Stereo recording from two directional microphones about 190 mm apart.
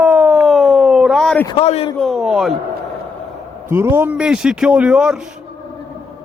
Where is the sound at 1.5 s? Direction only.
30° left (ahead or behind).